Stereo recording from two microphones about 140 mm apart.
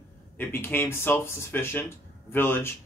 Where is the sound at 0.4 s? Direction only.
15° left (ahead or behind).